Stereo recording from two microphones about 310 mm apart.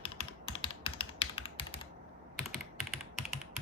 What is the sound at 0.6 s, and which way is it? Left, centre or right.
Typing, centre.